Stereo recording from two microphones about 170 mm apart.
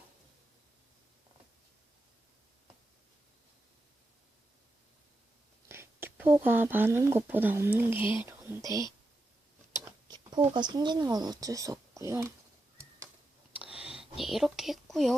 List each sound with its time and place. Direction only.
5.6 s speech: 15° right (ahead or behind)
10.1 s speech: 25° right (ahead or behind)
13.6 s whispering: 5° right (ahead or behind)